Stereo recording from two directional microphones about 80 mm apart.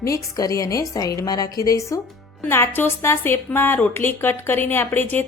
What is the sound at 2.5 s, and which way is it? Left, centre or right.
A woman's voice, left.